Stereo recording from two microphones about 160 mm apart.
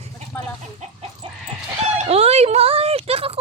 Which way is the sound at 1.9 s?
40° right (ahead or behind).